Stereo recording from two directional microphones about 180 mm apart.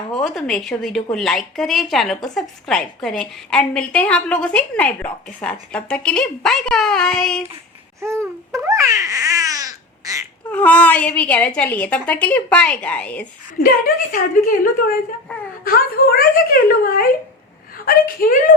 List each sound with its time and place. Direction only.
0.1 s speech: 5° left (ahead or behind)
8.0 s babbling: 15° right (ahead or behind)
10.5 s a woman's voice: 10° left (ahead or behind)
13.6 s speech: 50° left (ahead or behind)
15.3 s a woman's voice: 10° left (ahead or behind)
15.7 s speech: 55° left (ahead or behind)